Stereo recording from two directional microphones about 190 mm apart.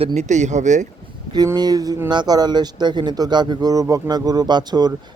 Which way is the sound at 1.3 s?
20° right (ahead or behind).